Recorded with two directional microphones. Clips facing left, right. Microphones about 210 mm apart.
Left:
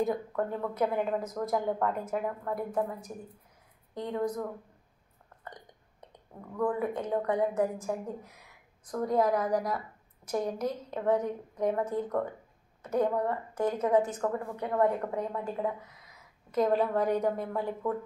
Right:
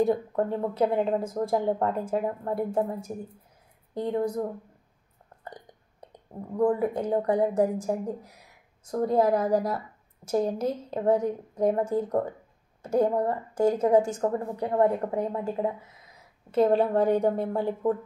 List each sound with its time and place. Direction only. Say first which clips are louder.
0.0 s a woman's voice: right 5 dB; 30° right (ahead or behind)
8.8 s a woman's voice: right 4 dB; 25° right (ahead or behind)